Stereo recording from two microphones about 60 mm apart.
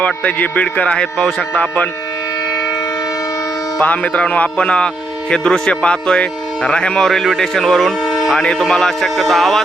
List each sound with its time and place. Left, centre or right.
0.0 s speech: left
3.8 s speech: left; by 9.6 s centre